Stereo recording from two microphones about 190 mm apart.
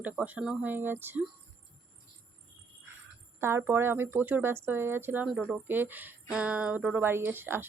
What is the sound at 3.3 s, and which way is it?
Speech, 15° right (ahead or behind).